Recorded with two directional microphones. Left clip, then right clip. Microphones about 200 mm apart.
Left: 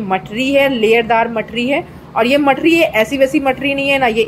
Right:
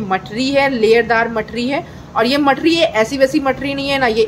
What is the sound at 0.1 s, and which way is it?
A woman's voice, 10° left (ahead or behind).